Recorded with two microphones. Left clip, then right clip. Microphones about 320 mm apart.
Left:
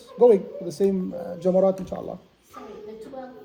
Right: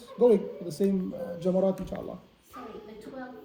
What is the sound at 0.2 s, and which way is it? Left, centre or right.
Speech, centre.